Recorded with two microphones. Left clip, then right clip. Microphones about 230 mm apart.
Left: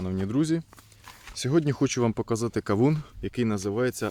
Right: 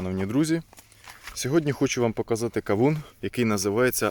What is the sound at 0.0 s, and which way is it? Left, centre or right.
Speech, centre.